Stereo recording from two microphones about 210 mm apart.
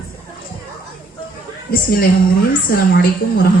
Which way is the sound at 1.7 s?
45° left (ahead or behind).